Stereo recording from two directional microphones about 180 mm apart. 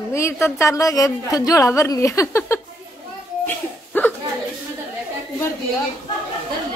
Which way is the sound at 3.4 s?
10° left (ahead or behind).